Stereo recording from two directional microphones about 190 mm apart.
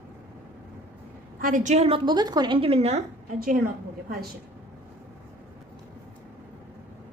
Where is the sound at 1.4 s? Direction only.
45° right (ahead or behind).